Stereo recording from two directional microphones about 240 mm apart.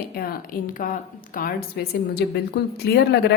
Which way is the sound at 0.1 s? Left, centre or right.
Left.